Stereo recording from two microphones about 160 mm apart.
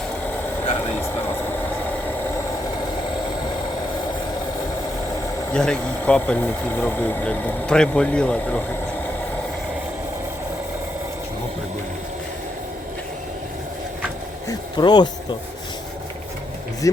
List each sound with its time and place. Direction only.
5.5 s speech: 5° left (ahead or behind)
14.4 s speech: 25° left (ahead or behind)
16.8 s speech: 20° left (ahead or behind)